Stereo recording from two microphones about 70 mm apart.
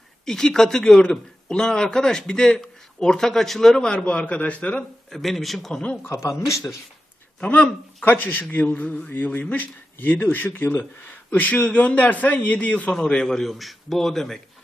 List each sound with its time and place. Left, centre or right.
0.3 s a man's voice: centre
5.0 s a man's voice: centre
7.4 s a man's voice: centre